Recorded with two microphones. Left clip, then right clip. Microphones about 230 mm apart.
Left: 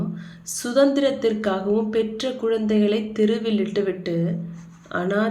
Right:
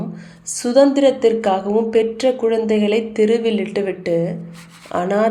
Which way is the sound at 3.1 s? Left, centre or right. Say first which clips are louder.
Right 6 dB; left.